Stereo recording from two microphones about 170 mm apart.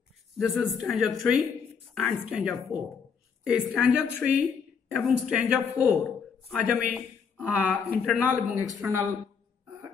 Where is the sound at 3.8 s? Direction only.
5° right (ahead or behind).